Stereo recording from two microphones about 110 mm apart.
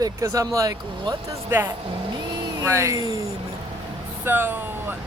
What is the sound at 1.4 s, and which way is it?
Speech, 20° right (ahead or behind).